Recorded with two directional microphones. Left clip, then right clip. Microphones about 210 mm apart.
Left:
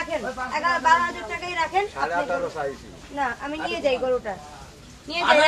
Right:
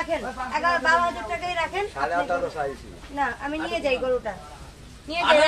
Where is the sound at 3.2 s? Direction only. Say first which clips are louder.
Even; 15° left (ahead or behind).